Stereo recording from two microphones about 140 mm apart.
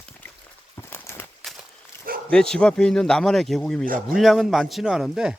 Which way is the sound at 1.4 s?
Centre (ahead or behind).